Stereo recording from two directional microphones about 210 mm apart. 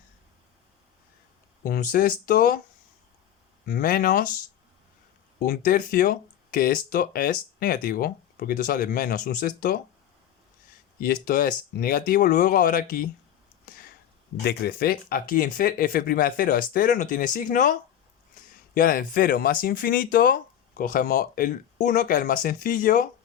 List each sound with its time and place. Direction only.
1.6 s speech: 40° left (ahead or behind)
3.7 s speech: 45° left (ahead or behind)
11.0 s speech: 45° left (ahead or behind)
13.7 s a sound: 45° left (ahead or behind)
14.4 s speech: 50° left (ahead or behind)